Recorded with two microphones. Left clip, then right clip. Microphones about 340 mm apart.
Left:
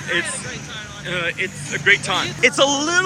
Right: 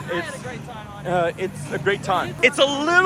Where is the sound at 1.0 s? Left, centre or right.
Centre.